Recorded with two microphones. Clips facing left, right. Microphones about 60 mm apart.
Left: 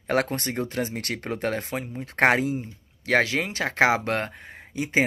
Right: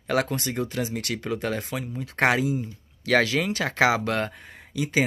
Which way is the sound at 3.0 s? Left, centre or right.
Left.